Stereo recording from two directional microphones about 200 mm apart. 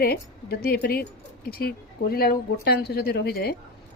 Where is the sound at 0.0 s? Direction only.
50° left (ahead or behind).